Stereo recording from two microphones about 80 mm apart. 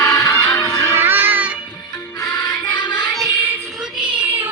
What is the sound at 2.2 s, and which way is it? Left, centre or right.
Music, left.